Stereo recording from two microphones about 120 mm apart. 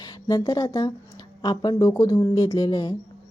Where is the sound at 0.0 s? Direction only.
30° left (ahead or behind).